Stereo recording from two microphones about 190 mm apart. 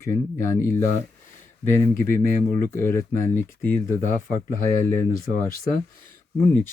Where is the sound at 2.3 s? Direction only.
45° left (ahead or behind).